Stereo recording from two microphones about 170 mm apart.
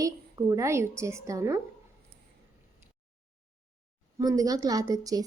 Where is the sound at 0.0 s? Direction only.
20° right (ahead or behind).